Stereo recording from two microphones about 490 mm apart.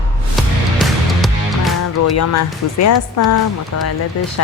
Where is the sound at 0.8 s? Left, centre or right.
Centre.